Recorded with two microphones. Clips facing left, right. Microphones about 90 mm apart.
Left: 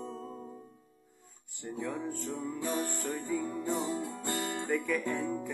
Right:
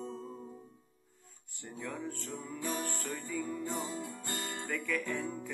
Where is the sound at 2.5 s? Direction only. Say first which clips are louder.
Left 1 dB; 20° left (ahead or behind).